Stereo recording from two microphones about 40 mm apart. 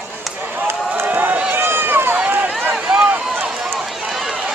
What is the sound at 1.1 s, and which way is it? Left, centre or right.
Run, right.